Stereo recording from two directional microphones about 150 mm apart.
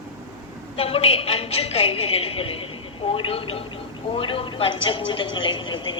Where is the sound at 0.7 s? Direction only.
40° left (ahead or behind).